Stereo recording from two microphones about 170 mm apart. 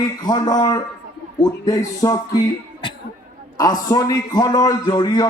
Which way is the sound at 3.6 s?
25° left (ahead or behind).